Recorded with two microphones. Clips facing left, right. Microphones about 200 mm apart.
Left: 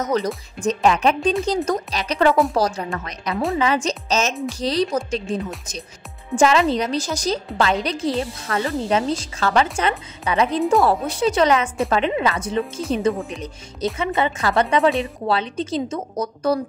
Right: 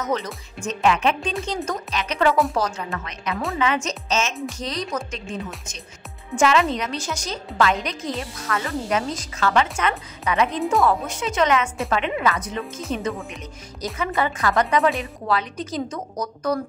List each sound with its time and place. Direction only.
0.0 s a woman's voice: 35° left (ahead or behind)
6.3 s a woman's voice: 35° left (ahead or behind)